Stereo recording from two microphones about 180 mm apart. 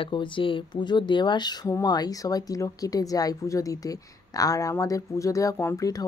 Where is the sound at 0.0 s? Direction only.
25° left (ahead or behind).